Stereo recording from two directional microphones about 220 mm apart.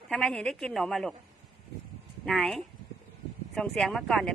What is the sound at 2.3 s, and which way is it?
Speech, 5° left (ahead or behind).